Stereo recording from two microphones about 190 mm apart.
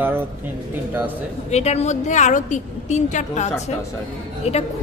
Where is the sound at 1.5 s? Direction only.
35° left (ahead or behind).